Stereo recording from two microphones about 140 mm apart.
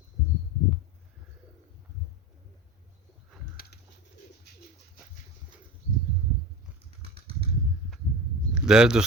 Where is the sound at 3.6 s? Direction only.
90° left.